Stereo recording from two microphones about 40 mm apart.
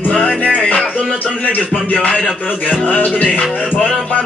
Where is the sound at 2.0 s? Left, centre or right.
Left.